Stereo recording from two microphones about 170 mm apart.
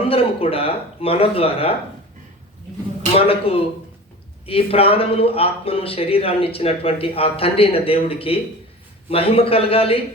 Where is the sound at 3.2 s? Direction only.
35° left (ahead or behind).